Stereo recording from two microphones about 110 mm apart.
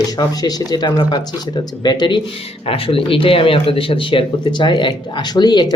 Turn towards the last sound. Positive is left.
turn(degrees=40)  # may be behind; listen again after turning